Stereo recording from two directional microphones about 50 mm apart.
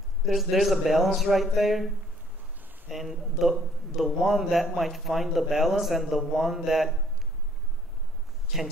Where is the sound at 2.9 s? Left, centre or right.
Centre.